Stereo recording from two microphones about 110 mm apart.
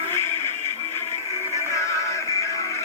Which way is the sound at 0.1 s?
20° left (ahead or behind).